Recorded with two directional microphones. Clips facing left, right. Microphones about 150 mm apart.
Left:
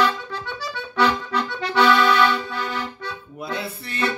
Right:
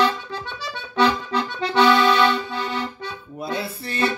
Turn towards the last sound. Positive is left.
turn(degrees=-30)  # may be behind; listen again after turning